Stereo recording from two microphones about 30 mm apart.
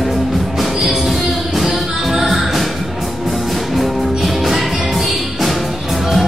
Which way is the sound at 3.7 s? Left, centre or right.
Centre.